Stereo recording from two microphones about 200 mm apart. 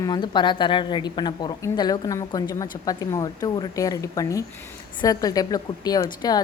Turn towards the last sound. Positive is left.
turn(degrees=20)  # may be behind; listen again after turning